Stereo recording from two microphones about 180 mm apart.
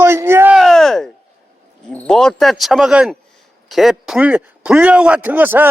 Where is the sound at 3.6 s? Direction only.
Centre (ahead or behind).